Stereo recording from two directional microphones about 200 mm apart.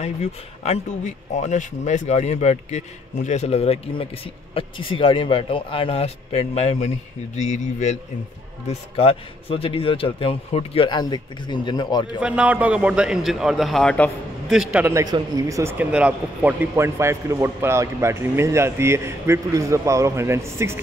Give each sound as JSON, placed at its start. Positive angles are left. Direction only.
{"t": 0.0, "sound": "a man's voice", "side_deg": 35}
{"t": 12.2, "sound": "a man's voice", "side_deg": -5}